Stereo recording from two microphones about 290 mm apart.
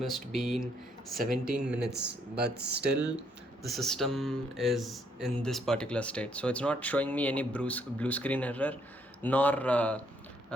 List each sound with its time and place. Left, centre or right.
0.0 s speech: centre
1.8 s speech: right
3.2 s speech: centre